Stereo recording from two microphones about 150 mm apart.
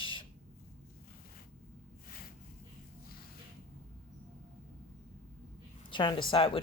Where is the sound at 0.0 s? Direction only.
35° left (ahead or behind).